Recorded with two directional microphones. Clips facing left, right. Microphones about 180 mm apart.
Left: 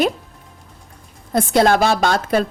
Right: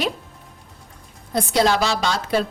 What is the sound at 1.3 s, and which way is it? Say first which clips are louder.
A woman's voice: left 4 dB; 50° left (ahead or behind).